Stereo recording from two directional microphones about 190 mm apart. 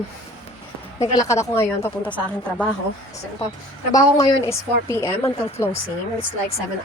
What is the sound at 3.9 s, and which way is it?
Speech, 15° left (ahead or behind).